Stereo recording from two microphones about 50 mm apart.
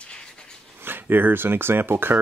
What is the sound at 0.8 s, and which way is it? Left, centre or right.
Speech, right.